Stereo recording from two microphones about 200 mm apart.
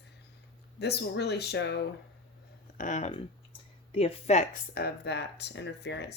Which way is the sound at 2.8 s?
40° left (ahead or behind).